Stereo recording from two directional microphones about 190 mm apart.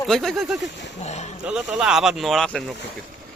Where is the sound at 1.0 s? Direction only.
35° left (ahead or behind).